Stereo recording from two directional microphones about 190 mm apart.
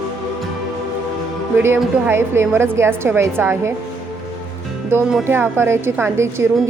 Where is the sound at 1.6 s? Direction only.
10° right (ahead or behind).